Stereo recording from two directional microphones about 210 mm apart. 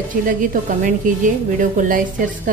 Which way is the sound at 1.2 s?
40° right (ahead or behind).